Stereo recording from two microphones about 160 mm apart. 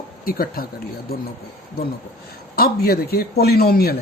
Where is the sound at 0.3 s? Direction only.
65° left (ahead or behind).